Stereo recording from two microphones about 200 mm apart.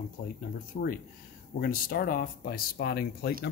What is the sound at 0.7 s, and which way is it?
Speech, 45° left (ahead or behind).